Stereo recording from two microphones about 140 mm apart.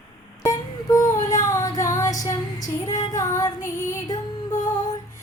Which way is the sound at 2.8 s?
25° left (ahead or behind).